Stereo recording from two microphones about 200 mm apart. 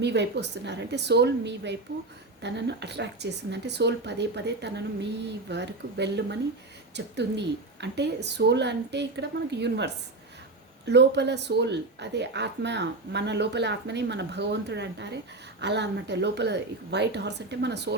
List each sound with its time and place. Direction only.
0.0 s a woman's voice: 60° right (ahead or behind)